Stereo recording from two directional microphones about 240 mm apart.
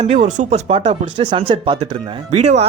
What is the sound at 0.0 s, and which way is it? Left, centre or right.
Speech, right.